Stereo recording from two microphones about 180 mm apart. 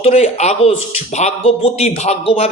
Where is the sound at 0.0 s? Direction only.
35° left (ahead or behind).